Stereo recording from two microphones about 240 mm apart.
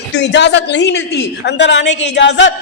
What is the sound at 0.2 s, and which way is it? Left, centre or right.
A man's voice, left.